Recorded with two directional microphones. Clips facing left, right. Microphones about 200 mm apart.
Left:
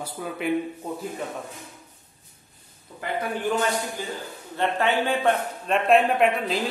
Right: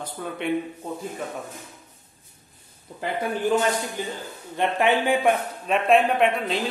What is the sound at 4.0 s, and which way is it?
Speech, 20° right (ahead or behind).